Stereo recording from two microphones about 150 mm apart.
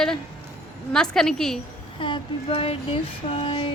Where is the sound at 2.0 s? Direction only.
35° left (ahead or behind).